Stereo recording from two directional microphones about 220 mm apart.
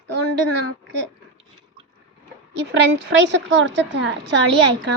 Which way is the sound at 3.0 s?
55° right (ahead or behind).